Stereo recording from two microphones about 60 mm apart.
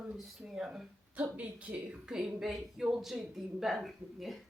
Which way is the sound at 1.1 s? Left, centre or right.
Right.